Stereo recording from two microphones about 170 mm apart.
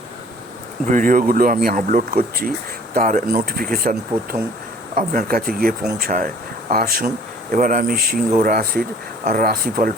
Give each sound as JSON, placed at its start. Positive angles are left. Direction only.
{"t": 0.9, "sound": "speech", "side_deg": -50}